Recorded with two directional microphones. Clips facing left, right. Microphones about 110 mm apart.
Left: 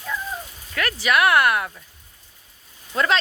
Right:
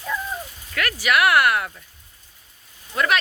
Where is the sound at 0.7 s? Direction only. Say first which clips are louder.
Even; 25° left (ahead or behind).